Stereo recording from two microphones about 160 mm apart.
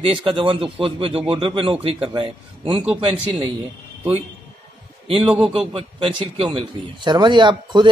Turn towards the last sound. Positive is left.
turn(degrees=-30)  # may be behind; listen again after turning